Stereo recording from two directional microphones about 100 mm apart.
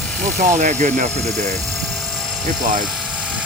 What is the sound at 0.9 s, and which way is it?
Speech, 90° right.